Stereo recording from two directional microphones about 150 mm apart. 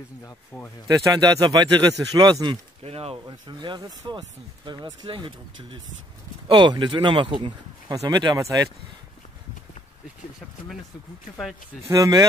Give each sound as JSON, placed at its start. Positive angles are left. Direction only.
{"t": 0.5, "sound": "speech", "side_deg": 15}
{"t": 0.8, "sound": "speech", "side_deg": -25}
{"t": 2.8, "sound": "speech", "side_deg": -40}
{"t": 11.9, "sound": "speech", "side_deg": -25}